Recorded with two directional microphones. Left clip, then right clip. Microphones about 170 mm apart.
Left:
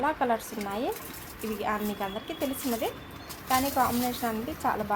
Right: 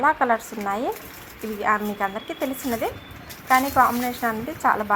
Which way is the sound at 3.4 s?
15° right (ahead or behind).